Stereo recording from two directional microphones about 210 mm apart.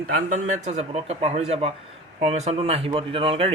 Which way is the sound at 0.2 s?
35° right (ahead or behind).